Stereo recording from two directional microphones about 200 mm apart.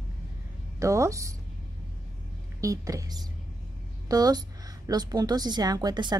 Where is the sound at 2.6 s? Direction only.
15° right (ahead or behind).